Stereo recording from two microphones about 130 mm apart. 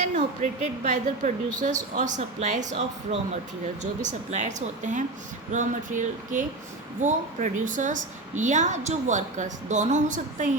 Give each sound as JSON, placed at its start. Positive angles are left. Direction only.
{"t": 0.0, "sound": "a woman's voice", "side_deg": -65}
{"t": 2.0, "sound": "a woman's voice", "side_deg": -70}
{"t": 4.0, "sound": "a woman's voice", "side_deg": -65}